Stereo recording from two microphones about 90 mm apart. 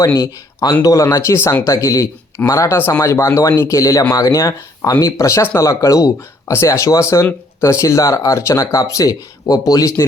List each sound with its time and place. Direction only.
0.0 s speech: 35° left (ahead or behind)
0.6 s speech: 45° left (ahead or behind)